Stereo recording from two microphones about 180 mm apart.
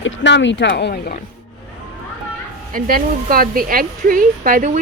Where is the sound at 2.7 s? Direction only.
50° right (ahead or behind).